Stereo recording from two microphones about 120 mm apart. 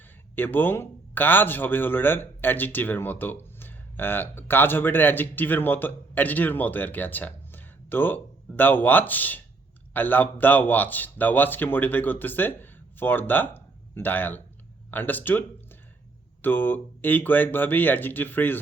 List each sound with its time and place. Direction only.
0.3 s a man's voice: 15° left (ahead or behind)